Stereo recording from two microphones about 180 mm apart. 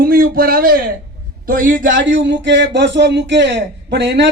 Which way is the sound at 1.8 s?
90° right.